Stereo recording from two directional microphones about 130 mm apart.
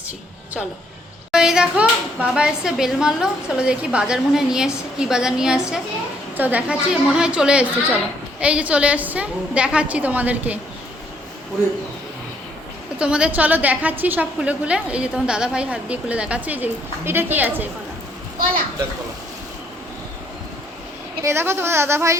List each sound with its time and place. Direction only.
1.3 s a woman's voice: 5° right (ahead or behind)
13.0 s a woman's voice: 10° right (ahead or behind)
21.2 s a woman's voice: 20° right (ahead or behind)